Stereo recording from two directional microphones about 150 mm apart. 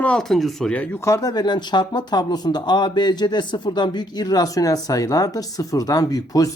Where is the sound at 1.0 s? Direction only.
25° left (ahead or behind).